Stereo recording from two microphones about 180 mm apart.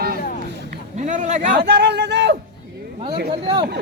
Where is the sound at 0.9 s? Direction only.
45° right (ahead or behind).